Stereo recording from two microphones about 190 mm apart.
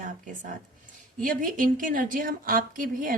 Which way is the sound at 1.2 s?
45° right (ahead or behind).